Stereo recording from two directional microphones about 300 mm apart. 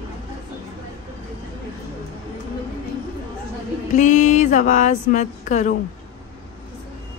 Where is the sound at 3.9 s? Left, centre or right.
Left.